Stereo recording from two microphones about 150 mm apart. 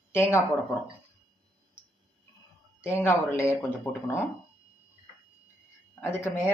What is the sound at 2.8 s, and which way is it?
Speech, 15° left (ahead or behind).